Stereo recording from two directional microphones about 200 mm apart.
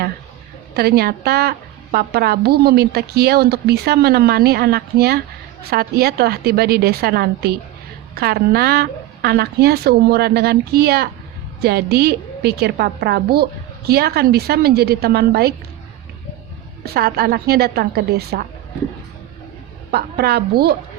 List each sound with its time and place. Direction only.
0.7 s speech: 50° right (ahead or behind)
16.8 s speech: 50° right (ahead or behind)
19.9 s speech: 50° right (ahead or behind)